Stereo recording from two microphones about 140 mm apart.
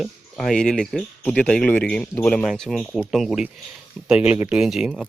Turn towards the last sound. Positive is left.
turn(degrees=-5)  # may be behind; listen again after turning